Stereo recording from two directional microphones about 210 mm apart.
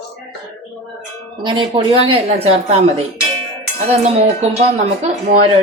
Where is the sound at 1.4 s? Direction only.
20° right (ahead or behind).